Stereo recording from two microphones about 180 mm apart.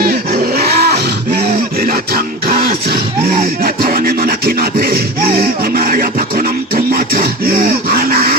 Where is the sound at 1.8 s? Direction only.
55° right (ahead or behind).